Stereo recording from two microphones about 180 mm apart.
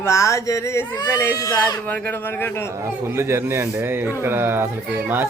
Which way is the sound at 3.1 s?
15° right (ahead or behind).